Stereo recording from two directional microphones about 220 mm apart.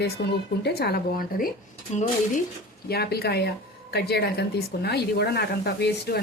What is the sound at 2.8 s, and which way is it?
A woman's voice, 45° left (ahead or behind).